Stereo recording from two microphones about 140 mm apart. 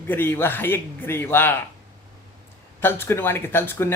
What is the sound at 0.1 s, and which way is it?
Speech, 15° left (ahead or behind).